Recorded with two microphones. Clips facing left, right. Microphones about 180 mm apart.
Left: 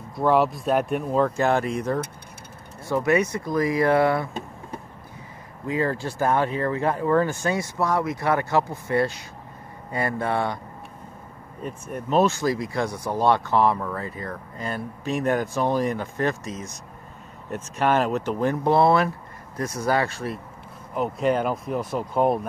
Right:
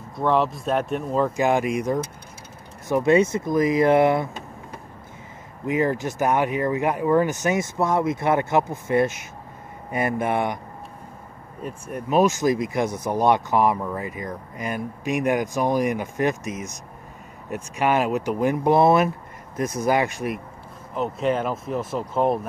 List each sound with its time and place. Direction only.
0.1 s speech: 5° left (ahead or behind)
1.3 s speech: 15° right (ahead or behind)
2.9 s speech: 25° right (ahead or behind)
5.7 s speech: 20° right (ahead or behind)
11.6 s speech: 10° right (ahead or behind)
20.9 s speech: centre (ahead or behind)